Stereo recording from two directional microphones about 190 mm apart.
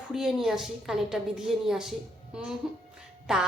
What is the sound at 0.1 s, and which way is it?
A woman's voice, centre (ahead or behind).